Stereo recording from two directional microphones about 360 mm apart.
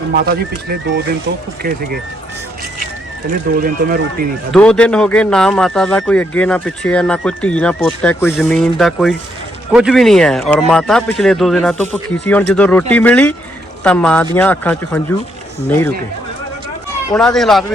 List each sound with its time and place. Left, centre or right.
0.1 s speech: right
3.2 s speech: right
4.5 s speech: centre
17.1 s speech: centre